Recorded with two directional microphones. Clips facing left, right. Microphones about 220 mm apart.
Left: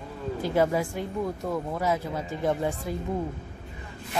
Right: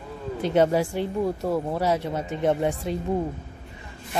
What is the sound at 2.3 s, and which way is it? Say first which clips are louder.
Speech: right 4 dB; 20° right (ahead or behind).